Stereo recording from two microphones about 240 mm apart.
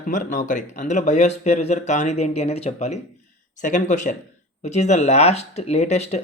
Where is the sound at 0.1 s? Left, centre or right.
Left.